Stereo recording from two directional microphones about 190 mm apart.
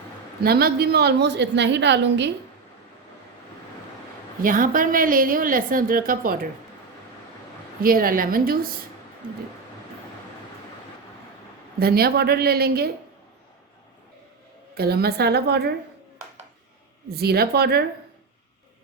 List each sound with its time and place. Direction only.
0.4 s a woman's voice: 55° right (ahead or behind)
4.4 s a woman's voice: 45° right (ahead or behind)
7.8 s a woman's voice: 50° right (ahead or behind)
11.8 s a woman's voice: 55° right (ahead or behind)
14.8 s a woman's voice: 55° right (ahead or behind)
17.1 s a woman's voice: 55° right (ahead or behind)